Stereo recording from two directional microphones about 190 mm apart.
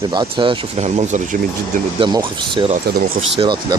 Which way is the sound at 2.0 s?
25° right (ahead or behind).